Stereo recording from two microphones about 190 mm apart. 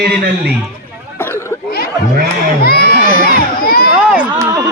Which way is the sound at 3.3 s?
50° left (ahead or behind).